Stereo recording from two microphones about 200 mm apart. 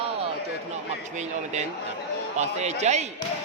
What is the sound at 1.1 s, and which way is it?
Speech, 35° right (ahead or behind).